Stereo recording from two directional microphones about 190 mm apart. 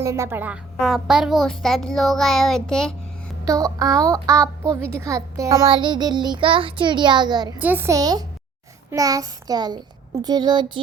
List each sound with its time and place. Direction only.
0.0 s a child's voice: 15° right (ahead or behind); by 2.9 s centre (ahead or behind)
3.4 s a child's voice: 20° right (ahead or behind)
7.6 s a woman's voice: 10° right (ahead or behind)